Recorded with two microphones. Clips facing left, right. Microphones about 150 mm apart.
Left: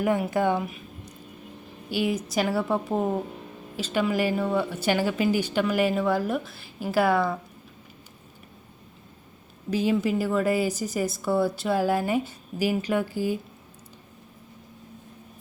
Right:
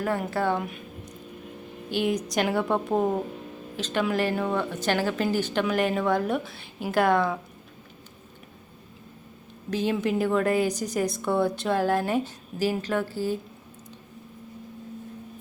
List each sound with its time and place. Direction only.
0.0 s speech: 15° left (ahead or behind)
0.6 s a sound: centre (ahead or behind)
1.9 s a woman's voice: 5° left (ahead or behind)
9.6 s a woman's voice: 10° left (ahead or behind)